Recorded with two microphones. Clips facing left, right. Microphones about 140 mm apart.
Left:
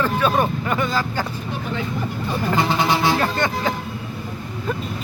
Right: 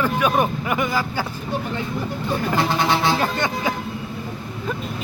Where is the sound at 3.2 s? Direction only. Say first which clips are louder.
Left 1 dB; 15° right (ahead or behind).